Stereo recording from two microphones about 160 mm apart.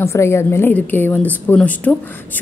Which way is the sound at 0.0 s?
15° left (ahead or behind).